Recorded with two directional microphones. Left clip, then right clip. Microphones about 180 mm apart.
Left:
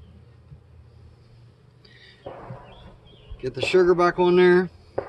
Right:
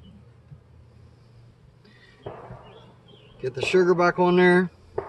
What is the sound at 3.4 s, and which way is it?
Speech, 25° left (ahead or behind).